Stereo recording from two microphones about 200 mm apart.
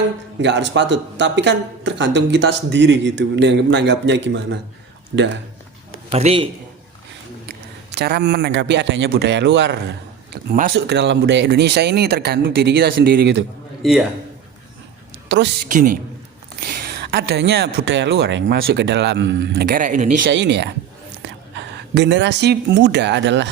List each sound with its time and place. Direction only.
0.4 s speech: 65° right (ahead or behind)
6.1 s a man's voice: 30° right (ahead or behind)
7.4 s a man's voice: 55° right (ahead or behind)
10.3 s speech: 50° right (ahead or behind)
15.3 s speech: 60° right (ahead or behind)
15.7 s speech: 45° right (ahead or behind)
20.2 s speech: 60° right (ahead or behind)